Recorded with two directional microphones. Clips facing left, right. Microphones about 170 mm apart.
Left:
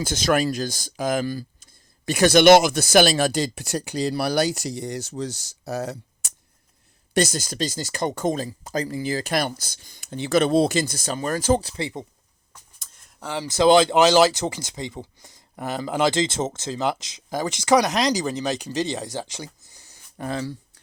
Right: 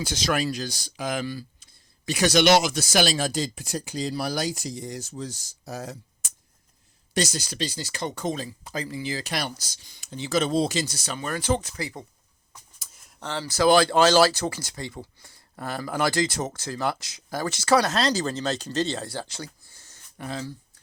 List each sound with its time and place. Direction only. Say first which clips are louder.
0.0 s speech: left 5 dB; 50° left (ahead or behind); by 6.3 s 70° left (ahead or behind)
7.1 s speech: left 5 dB; 55° left (ahead or behind)
11.8 s speech: left 4 dB; 25° left (ahead or behind)
12.8 s a sound: even; 5° right (ahead or behind)
13.2 s speech: left 3 dB; 15° left (ahead or behind)